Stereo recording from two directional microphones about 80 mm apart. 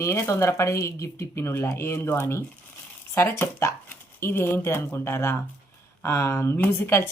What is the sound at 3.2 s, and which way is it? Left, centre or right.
Speech, left.